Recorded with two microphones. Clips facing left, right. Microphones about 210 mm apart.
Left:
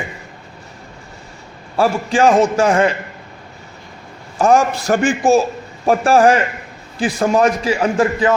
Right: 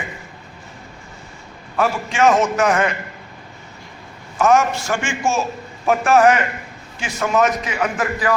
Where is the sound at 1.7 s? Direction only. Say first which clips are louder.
Left 4 dB; 35° left (ahead or behind).